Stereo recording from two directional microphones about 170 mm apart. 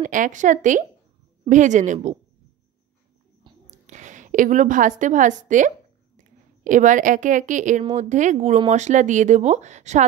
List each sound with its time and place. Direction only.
0.0 s a woman's voice: 50° right (ahead or behind)
3.4 s whispering: 25° right (ahead or behind)
3.8 s a woman's voice: 45° right (ahead or behind)